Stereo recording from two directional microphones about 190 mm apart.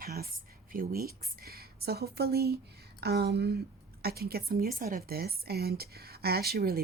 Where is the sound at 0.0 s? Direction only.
55° right (ahead or behind).